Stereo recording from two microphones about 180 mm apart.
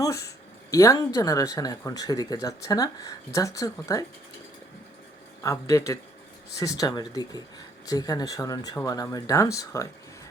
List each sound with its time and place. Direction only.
0.0 s a sound: 15° left (ahead or behind)
0.7 s speech: 15° left (ahead or behind)
5.4 s a man's voice: 15° left (ahead or behind)